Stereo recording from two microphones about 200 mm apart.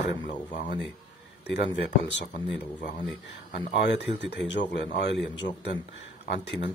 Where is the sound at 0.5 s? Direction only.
35° left (ahead or behind).